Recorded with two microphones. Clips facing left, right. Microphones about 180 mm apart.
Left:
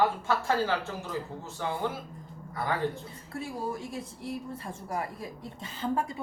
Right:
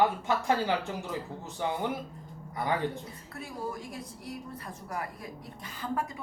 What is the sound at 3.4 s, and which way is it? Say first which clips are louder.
Speech: left 2 dB; 25° left (ahead or behind).